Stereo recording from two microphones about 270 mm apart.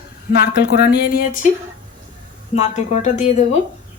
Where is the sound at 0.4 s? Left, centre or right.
Left.